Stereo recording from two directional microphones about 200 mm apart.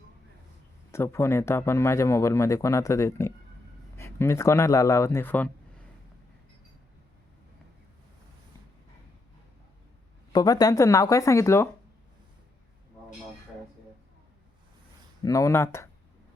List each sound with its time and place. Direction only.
0.9 s speech: 15° left (ahead or behind)
10.3 s speech: 20° left (ahead or behind)
15.2 s speech: 15° left (ahead or behind)